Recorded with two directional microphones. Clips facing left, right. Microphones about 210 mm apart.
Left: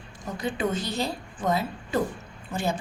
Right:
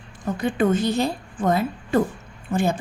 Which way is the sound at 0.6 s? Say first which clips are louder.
Right 9 dB; 50° right (ahead or behind).